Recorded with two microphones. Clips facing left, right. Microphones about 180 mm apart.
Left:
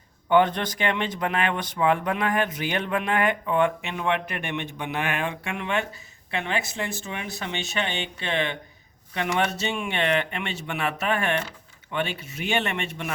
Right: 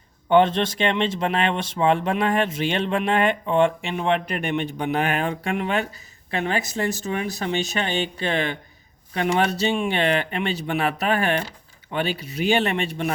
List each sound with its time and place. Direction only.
0.3 s speech: 25° right (ahead or behind)